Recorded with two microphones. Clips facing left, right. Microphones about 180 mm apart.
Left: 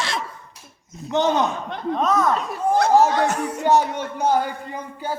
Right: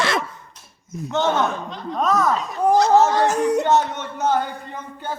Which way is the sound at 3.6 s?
10° left (ahead or behind).